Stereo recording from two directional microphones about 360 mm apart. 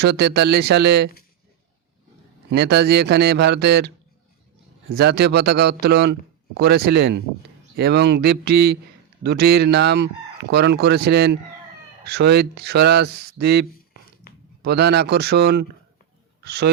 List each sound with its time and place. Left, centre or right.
0.0 s speech: right
2.5 s speech: right